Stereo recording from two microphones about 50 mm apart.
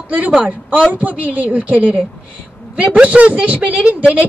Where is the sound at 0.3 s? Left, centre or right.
Right.